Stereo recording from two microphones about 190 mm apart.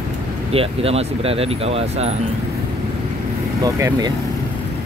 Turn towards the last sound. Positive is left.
turn(degrees=-20)  # may be behind; listen again after turning